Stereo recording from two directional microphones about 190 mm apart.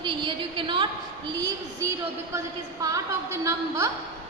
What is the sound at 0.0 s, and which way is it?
A woman's voice, 25° right (ahead or behind).